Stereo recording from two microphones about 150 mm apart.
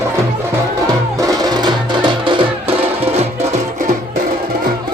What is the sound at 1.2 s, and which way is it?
Music, 25° right (ahead or behind).